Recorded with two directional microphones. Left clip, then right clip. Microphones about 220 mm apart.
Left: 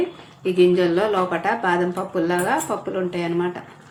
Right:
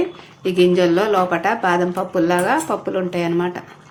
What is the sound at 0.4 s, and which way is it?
Speech, 25° right (ahead or behind).